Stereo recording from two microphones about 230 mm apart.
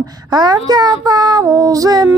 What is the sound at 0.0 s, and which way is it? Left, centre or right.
Speech, centre.